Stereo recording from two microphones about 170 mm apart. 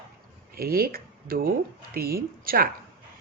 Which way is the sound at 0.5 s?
65° right (ahead or behind).